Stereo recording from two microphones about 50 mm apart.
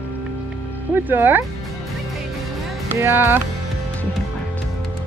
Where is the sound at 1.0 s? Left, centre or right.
Right.